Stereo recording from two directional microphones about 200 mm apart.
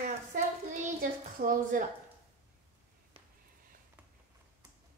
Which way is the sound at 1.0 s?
45° right (ahead or behind).